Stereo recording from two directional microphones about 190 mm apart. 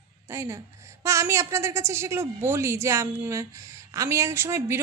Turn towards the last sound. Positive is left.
turn(degrees=-15)  # may be behind; listen again after turning